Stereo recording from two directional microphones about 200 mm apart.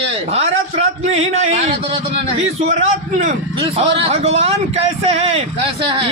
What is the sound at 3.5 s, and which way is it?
A man's voice, 25° right (ahead or behind).